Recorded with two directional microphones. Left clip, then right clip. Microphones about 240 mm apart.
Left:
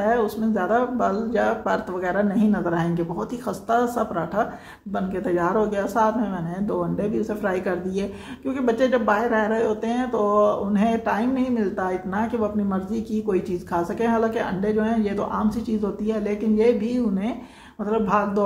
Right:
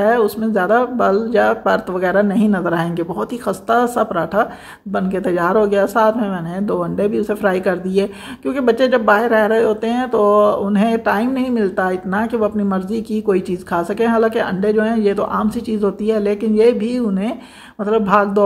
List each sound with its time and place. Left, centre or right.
0.0 s speech: right